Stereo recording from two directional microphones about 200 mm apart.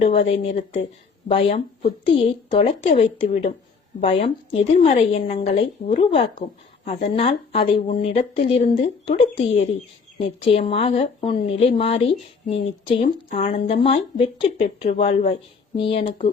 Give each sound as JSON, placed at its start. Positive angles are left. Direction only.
{"t": 0.0, "sound": "speech", "side_deg": 30}
{"t": 9.4, "sound": "speech", "side_deg": 45}
{"t": 10.2, "sound": "speech", "side_deg": 30}